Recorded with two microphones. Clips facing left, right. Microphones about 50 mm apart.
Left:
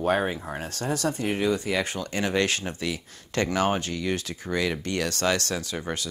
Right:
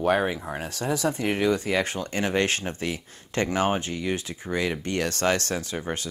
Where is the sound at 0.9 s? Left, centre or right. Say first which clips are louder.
Right 2 dB; right.